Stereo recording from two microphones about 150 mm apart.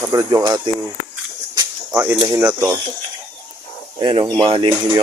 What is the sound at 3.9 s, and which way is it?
Speech, 30° right (ahead or behind).